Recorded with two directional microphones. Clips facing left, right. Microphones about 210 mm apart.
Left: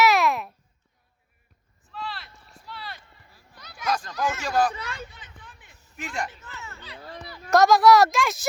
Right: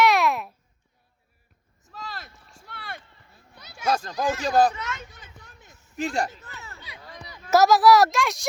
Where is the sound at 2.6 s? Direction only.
50° right (ahead or behind).